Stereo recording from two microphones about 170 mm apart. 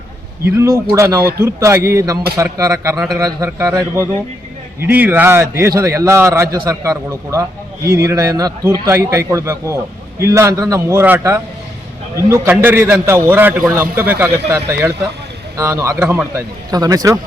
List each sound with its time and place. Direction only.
0.4 s a man's voice: 15° right (ahead or behind)